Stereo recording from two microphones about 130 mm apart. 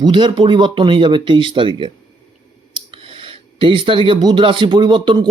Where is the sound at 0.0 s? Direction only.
40° right (ahead or behind).